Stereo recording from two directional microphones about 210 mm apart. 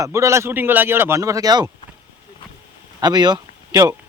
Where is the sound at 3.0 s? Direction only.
20° right (ahead or behind).